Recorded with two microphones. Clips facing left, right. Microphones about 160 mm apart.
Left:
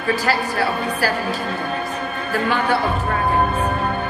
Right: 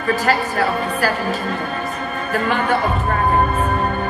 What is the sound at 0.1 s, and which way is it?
Speech, 40° left (ahead or behind).